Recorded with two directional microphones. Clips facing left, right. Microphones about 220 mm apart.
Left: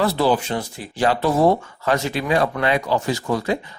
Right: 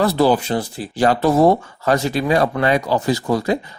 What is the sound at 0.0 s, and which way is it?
Speech, 40° right (ahead or behind).